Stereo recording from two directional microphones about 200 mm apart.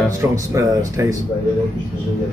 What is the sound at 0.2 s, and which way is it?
Speech, 15° right (ahead or behind).